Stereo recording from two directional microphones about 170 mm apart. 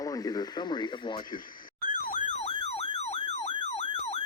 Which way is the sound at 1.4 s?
55° left (ahead or behind).